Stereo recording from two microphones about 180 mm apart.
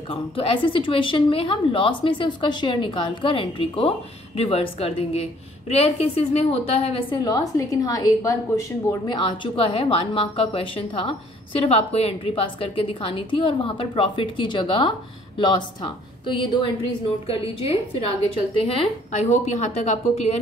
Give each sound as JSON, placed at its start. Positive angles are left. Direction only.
{"t": 0.1, "sound": "a woman's voice", "side_deg": 30}